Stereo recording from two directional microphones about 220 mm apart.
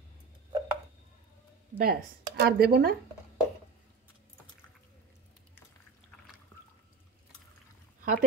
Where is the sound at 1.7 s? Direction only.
40° right (ahead or behind).